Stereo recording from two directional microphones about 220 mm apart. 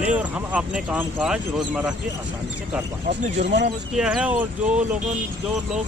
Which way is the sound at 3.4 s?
50° right (ahead or behind).